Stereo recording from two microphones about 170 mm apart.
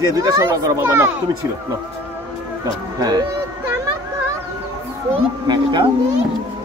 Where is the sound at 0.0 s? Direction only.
20° right (ahead or behind).